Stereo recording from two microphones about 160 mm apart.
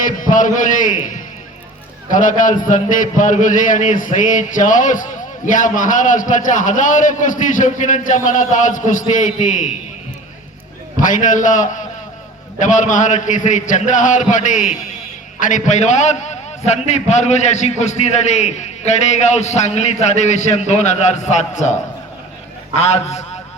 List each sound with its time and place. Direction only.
0.2 s a man's voice: 55° left (ahead or behind)
10.9 s a man's voice: 55° left (ahead or behind)
22.8 s a man's voice: 45° left (ahead or behind)